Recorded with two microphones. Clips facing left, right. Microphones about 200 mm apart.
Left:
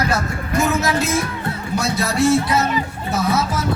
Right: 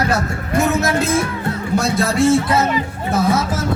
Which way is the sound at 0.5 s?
55° right (ahead or behind).